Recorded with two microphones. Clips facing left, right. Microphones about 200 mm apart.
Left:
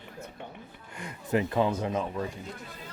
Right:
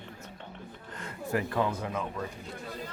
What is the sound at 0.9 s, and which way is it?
Speech, 15° left (ahead or behind).